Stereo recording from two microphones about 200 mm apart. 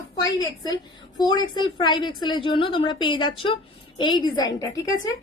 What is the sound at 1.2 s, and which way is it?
A woman's voice, 20° left (ahead or behind).